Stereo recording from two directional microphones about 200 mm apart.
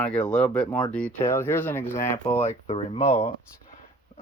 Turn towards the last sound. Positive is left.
turn(degrees=30)  # may be behind; listen again after turning